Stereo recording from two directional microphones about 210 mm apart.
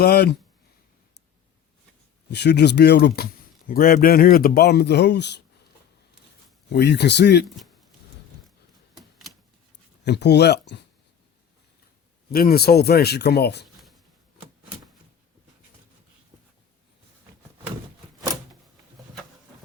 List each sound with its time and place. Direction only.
0.0 s speech: 50° left (ahead or behind)
2.3 s speech: 55° left (ahead or behind)
6.7 s speech: 55° left (ahead or behind)
9.0 s typewriter: centre (ahead or behind)
10.0 s speech: 55° left (ahead or behind)
12.3 s speech: 45° left (ahead or behind)